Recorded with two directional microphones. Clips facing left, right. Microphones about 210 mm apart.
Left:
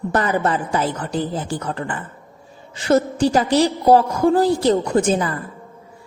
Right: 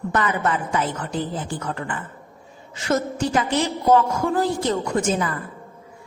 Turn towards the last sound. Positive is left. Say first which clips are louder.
# left 4 dB
turn(degrees=35)  # may be behind; listen again after turning